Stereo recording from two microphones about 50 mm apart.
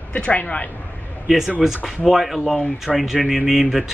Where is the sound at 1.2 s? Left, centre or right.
Centre.